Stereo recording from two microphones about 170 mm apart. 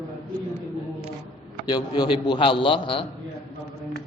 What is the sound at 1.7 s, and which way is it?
A man's voice, 25° left (ahead or behind).